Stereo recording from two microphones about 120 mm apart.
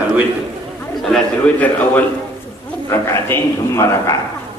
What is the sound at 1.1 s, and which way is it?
A man's voice, 10° left (ahead or behind).